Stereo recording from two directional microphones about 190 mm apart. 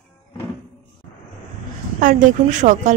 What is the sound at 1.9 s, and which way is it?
A woman's voice, 45° right (ahead or behind).